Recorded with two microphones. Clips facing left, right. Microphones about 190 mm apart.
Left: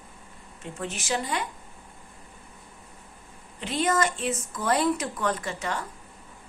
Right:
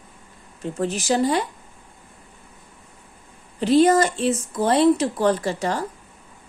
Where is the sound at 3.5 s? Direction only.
35° right (ahead or behind).